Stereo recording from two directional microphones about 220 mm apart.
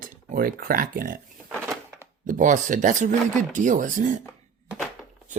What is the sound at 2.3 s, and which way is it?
Speech, 35° right (ahead or behind).